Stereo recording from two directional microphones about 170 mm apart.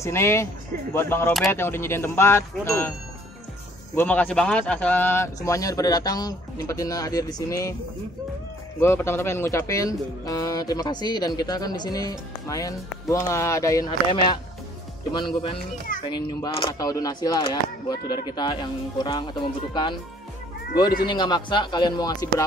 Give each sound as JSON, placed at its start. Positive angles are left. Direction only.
{"t": 0.0, "sound": "speech", "side_deg": 15}
{"t": 3.9, "sound": "speech", "side_deg": 10}
{"t": 8.8, "sound": "speech", "side_deg": 15}
{"t": 21.1, "sound": "speech", "side_deg": 25}